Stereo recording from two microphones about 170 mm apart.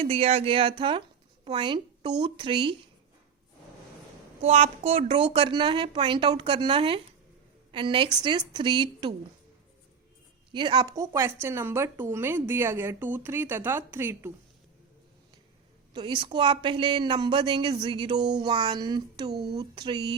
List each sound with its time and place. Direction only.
0.0 s a woman's voice: 35° right (ahead or behind)
4.4 s a woman's voice: 40° right (ahead or behind)
10.5 s speech: 25° right (ahead or behind)
15.9 s speech: 25° right (ahead or behind)
19.3 s speech: 70° right (ahead or behind)
19.5 s speech: 25° right (ahead or behind)